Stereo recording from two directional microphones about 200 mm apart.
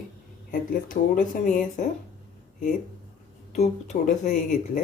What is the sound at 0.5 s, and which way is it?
Speech, 45° left (ahead or behind).